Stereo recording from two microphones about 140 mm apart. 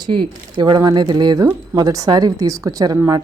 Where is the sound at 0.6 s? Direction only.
30° right (ahead or behind).